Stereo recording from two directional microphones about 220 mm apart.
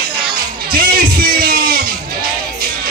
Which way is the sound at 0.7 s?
40° right (ahead or behind).